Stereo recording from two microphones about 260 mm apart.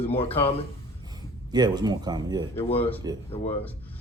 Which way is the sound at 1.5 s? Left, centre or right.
Centre.